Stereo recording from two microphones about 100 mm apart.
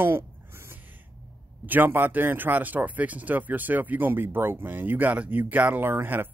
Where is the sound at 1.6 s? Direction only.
20° right (ahead or behind).